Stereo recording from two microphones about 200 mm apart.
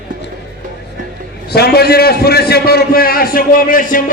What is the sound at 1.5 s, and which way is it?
A man's voice, 55° left (ahead or behind).